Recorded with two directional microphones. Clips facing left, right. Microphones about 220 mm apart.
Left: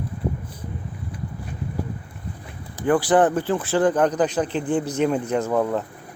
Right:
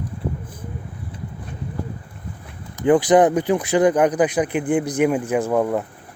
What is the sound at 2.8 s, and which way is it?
A man's voice, 20° right (ahead or behind).